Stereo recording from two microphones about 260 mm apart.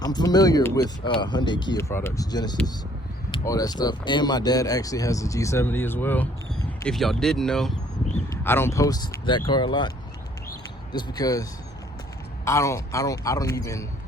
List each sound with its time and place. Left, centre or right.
0.0 s speech: centre
10.9 s speech: centre
12.5 s speech: centre